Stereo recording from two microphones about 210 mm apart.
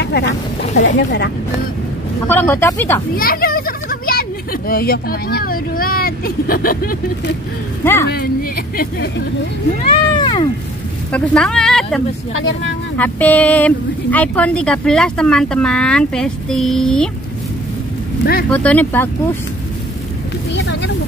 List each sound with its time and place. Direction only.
0.0 s speech: 50° left (ahead or behind)
2.2 s speech: 10° left (ahead or behind)
3.2 s a child's voice: 45° left (ahead or behind)
7.8 s speech: 10° left (ahead or behind)
9.8 s speech: 20° left (ahead or behind)
11.1 s speech: 5° left (ahead or behind)
18.5 s speech: 5° left (ahead or behind)
20.5 s speech: 55° left (ahead or behind)